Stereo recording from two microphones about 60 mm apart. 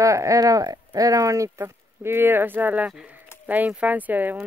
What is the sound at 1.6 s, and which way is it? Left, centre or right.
Speech, right.